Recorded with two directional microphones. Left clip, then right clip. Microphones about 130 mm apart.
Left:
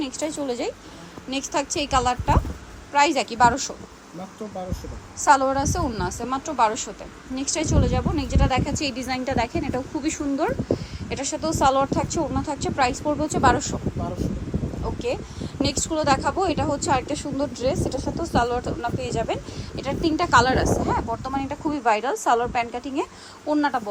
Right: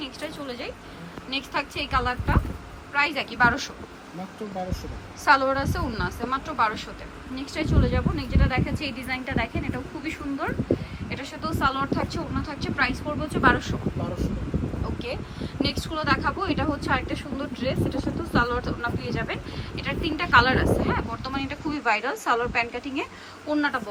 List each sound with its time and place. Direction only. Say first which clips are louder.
0.0 s a woman's voice: left 6 dB; 35° left (ahead or behind)
5.2 s a woman's voice: left 2 dB; 20° left (ahead or behind); by 13.7 s 35° left (ahead or behind)
14.9 s a woman's voice: left 5 dB; 30° left (ahead or behind)
18.3 s a woman's voice: left 2 dB; 25° left (ahead or behind)
23.5 s speech: left 3 dB; 15° left (ahead or behind)